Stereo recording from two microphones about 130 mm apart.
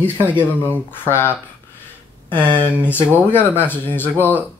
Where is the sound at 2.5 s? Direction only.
15° left (ahead or behind).